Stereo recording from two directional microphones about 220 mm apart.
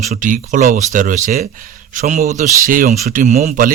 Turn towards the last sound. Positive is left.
turn(degrees=-35)  # may be behind; listen again after turning